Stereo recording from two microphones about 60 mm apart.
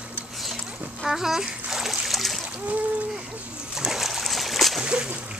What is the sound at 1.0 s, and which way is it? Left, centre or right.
Splash, centre.